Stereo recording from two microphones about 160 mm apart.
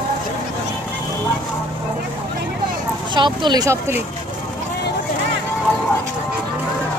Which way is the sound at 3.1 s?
30° right (ahead or behind).